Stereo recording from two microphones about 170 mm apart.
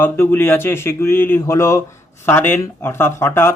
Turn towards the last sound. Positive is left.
turn(degrees=15)  # may be behind; listen again after turning